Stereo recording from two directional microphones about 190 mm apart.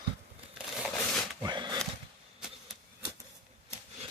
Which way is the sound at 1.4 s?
20° right (ahead or behind).